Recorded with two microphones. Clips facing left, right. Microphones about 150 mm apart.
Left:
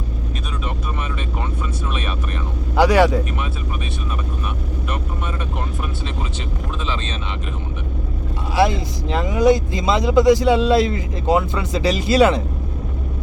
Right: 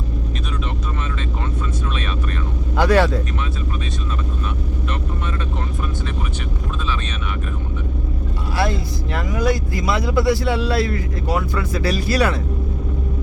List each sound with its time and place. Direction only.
2.7 s speech: 15° left (ahead or behind)
8.5 s speech: 20° left (ahead or behind)